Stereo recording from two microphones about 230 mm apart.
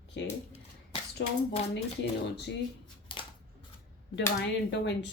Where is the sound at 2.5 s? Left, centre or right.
Left.